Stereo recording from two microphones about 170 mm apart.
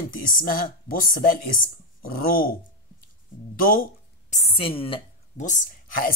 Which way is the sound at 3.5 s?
55° left (ahead or behind).